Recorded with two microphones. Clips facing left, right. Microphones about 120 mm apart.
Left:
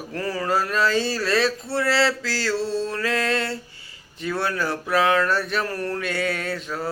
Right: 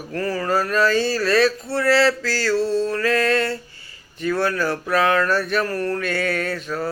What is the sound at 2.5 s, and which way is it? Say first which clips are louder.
Mantra: right 6 dB; 55° right (ahead or behind).